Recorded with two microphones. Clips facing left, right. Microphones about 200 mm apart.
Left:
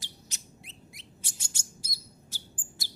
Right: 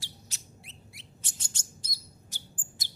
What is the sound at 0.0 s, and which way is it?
Chirp, 20° left (ahead or behind).